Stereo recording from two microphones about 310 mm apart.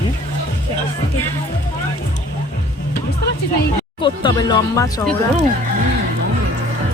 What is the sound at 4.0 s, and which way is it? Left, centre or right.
Speech, centre.